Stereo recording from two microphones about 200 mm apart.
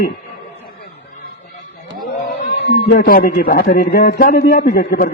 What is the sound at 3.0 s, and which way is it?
A man's voice, 45° left (ahead or behind).